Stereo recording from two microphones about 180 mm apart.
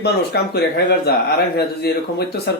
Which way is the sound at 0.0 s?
65° left (ahead or behind).